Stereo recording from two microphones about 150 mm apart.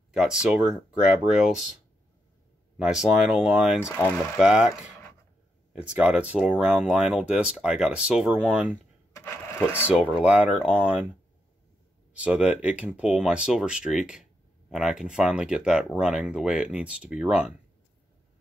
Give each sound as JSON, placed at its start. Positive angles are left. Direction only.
{"t": 0.1, "sound": "speech", "side_deg": -5}
{"t": 2.8, "sound": "speech", "side_deg": -5}
{"t": 3.8, "sound": "speech", "side_deg": 15}
{"t": 4.4, "sound": "speech", "side_deg": -5}
{"t": 9.1, "sound": "sewing machine", "side_deg": 15}
{"t": 9.8, "sound": "speech", "side_deg": -10}
{"t": 12.1, "sound": "speech", "side_deg": -5}